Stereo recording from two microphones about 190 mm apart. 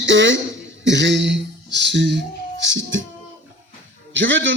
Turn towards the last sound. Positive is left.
turn(degrees=-75)  # may be behind; listen again after turning